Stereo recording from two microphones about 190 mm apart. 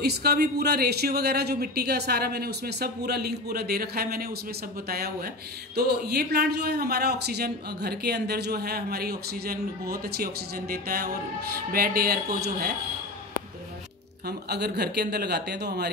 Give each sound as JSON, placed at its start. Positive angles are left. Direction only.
{"t": 0.0, "sound": "a man's voice", "side_deg": -60}
{"t": 14.2, "sound": "a man's voice", "side_deg": -60}